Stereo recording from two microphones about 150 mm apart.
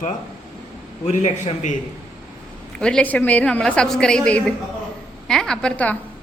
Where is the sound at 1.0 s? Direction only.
50° left (ahead or behind).